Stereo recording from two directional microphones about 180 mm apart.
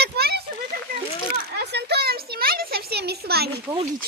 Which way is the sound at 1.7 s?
65° right (ahead or behind).